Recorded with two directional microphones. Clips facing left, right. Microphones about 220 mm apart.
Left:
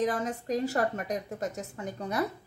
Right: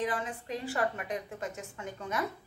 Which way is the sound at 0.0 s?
40° left (ahead or behind).